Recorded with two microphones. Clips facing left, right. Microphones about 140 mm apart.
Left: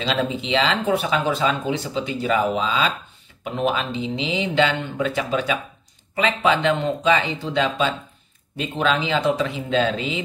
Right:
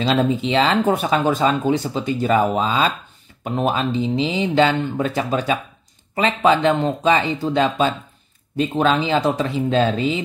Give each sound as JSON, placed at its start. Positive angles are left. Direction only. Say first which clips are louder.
{"t": 0.0, "sound": "speech", "louder": "right 5 dB", "side_deg": -40}